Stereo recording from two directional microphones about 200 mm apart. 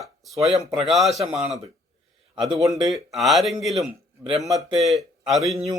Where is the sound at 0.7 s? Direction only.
Centre (ahead or behind).